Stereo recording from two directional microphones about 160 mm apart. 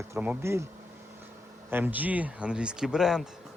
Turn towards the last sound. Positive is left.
turn(degrees=-5)  # may be behind; listen again after turning